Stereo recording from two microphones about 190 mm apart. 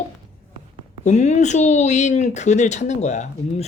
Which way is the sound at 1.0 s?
35° left (ahead or behind).